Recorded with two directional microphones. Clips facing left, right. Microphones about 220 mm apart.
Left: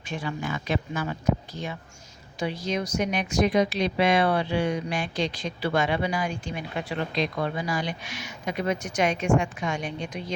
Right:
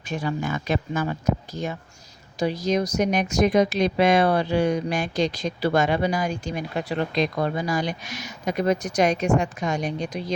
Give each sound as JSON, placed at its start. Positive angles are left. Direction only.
{"t": 0.1, "sound": "speech", "side_deg": -40}
{"t": 2.4, "sound": "speech", "side_deg": -40}